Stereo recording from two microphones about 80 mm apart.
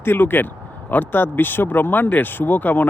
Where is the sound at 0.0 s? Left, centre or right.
Left.